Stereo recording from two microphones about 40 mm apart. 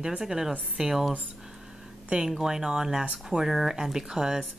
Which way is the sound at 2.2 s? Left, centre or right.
Centre.